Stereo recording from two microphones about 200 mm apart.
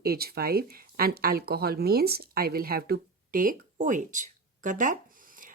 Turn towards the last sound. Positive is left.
turn(degrees=-40)  # may be behind; listen again after turning